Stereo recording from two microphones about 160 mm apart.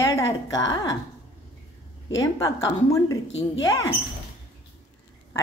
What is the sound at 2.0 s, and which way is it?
A woman's voice, 25° left (ahead or behind).